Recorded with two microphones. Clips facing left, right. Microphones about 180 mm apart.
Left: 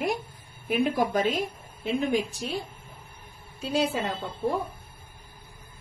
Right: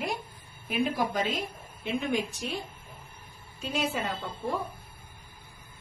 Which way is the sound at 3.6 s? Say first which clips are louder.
Left 5 dB; 35° left (ahead or behind).